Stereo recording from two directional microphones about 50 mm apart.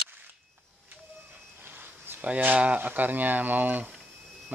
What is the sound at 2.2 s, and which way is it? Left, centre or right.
Speech, right.